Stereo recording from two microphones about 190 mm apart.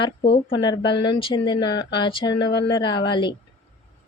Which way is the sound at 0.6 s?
25° left (ahead or behind).